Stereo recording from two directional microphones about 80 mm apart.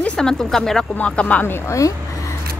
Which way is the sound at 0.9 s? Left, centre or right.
Centre.